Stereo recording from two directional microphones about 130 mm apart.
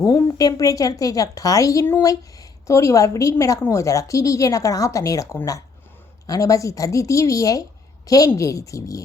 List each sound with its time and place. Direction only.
0.0 s a woman's voice: 25° left (ahead or behind)